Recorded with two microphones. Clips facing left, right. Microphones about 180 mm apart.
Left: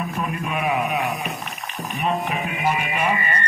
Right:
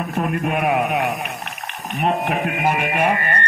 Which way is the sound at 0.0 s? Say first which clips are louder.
Right 5 dB; 65° right (ahead or behind).